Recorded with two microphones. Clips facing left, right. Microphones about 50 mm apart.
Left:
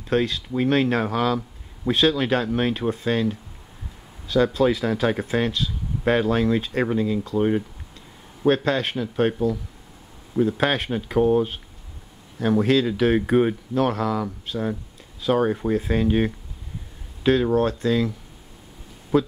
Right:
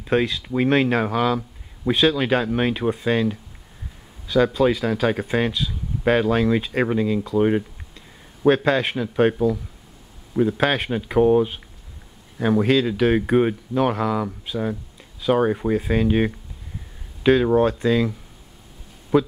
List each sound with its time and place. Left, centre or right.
0.0 s speech: centre
0.8 s speech: centre
4.3 s speech: centre
8.6 s speech: right
10.3 s speech: centre
12.5 s speech: centre